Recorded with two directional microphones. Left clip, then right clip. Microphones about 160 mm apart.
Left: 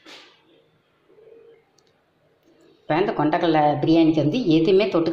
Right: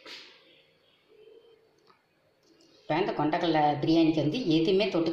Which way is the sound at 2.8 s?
5° left (ahead or behind).